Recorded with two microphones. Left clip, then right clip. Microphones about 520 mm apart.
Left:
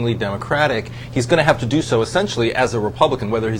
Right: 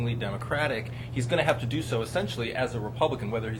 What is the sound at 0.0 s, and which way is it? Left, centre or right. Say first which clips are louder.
Speech: left 12 dB; left.